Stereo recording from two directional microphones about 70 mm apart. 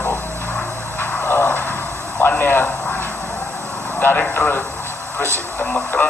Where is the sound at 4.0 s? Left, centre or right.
Left.